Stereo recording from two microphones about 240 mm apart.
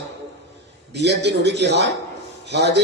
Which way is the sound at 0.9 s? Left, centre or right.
Right.